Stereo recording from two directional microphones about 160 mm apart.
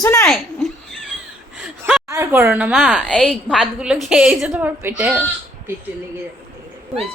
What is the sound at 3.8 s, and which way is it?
A woman's voice, 5° right (ahead or behind).